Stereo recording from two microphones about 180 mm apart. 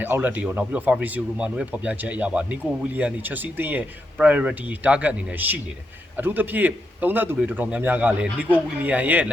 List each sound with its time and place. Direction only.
0.0 s speech: 10° right (ahead or behind)